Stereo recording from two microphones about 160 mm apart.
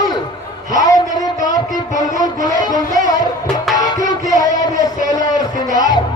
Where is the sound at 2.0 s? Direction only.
25° left (ahead or behind).